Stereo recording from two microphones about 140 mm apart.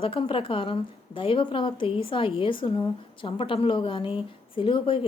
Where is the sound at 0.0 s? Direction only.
35° left (ahead or behind).